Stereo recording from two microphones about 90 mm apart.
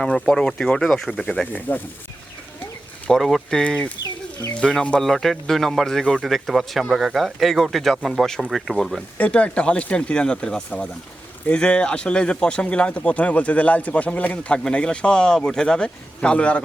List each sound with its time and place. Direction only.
0.0 s speech: 5° left (ahead or behind)
1.5 s speech: 20° left (ahead or behind)
3.1 s speech: centre (ahead or behind)
4.0 s chicken: 40° left (ahead or behind)
4.6 s speech: 10° left (ahead or behind)
9.1 s speech: 15° left (ahead or behind)